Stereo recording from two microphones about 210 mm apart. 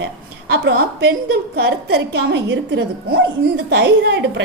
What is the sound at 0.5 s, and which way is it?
A woman's voice, 50° right (ahead or behind).